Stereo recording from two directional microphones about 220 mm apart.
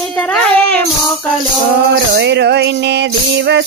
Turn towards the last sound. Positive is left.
turn(degrees=-55)  # may be behind; listen again after turning